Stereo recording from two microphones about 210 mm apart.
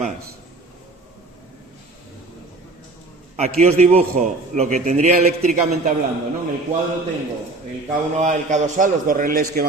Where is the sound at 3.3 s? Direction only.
30° right (ahead or behind).